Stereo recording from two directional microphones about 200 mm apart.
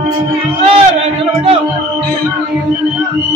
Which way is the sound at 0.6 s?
30° right (ahead or behind).